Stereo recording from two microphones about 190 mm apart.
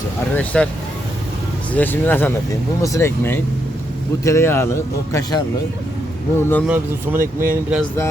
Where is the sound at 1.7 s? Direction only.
10° left (ahead or behind).